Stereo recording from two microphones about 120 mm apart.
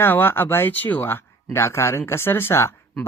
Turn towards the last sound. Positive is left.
turn(degrees=20)  # may be behind; listen again after turning